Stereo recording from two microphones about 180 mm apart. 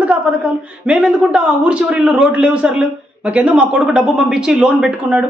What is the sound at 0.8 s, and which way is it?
A man's voice, 5° right (ahead or behind).